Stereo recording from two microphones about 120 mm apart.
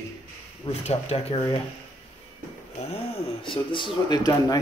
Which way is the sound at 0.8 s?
65° left (ahead or behind).